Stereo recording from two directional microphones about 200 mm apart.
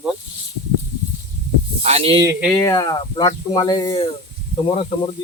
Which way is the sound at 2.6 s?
15° left (ahead or behind).